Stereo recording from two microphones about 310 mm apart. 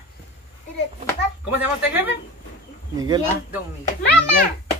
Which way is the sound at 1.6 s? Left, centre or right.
Centre.